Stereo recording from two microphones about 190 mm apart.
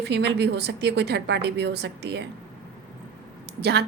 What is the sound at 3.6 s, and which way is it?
Speech, 60° right (ahead or behind).